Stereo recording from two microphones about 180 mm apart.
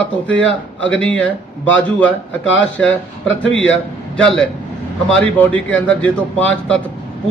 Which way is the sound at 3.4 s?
90° left.